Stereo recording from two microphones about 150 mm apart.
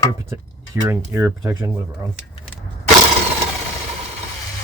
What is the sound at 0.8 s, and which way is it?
Speech, 15° right (ahead or behind).